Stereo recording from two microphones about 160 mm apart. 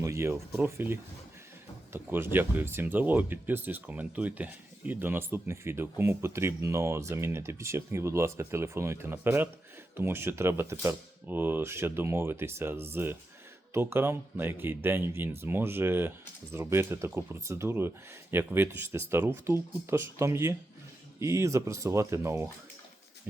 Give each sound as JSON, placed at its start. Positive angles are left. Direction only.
{"t": 0.0, "sound": "speech", "side_deg": -20}